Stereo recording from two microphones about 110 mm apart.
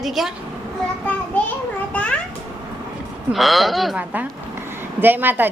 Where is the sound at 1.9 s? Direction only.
10° left (ahead or behind).